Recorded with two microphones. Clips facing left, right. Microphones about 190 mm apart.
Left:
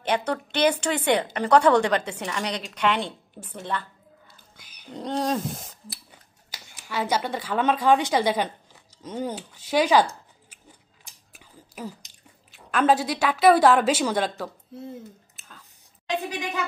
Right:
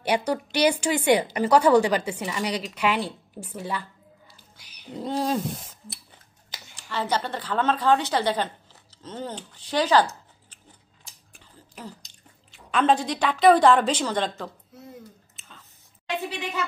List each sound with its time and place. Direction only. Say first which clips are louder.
0.0 s a woman's voice: right 1 dB; 10° right (ahead or behind)
4.9 s wild animals: even; 5° right (ahead or behind)
6.5 s speech: left 1 dB; 10° left (ahead or behind)
11.3 s a sound: left 4 dB; 10° left (ahead or behind)
12.1 s speech: even; 5° left (ahead or behind)
14.7 s speech: left 8 dB; 30° left (ahead or behind)
15.3 s whispering: left 1 dB; centre (ahead or behind)
16.3 s speech: left 1 dB; 15° left (ahead or behind)